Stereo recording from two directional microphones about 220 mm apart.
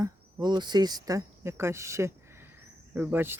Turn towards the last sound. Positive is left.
turn(degrees=-10)  # may be behind; listen again after turning